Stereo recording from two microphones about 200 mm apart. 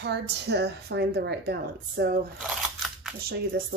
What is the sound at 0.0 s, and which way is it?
Speech, 55° right (ahead or behind).